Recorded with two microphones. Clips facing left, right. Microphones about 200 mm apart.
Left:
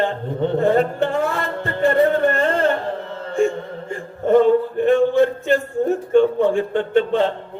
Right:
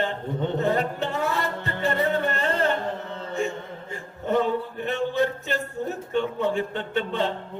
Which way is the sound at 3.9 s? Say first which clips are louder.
Left 9 dB; 50° left (ahead or behind).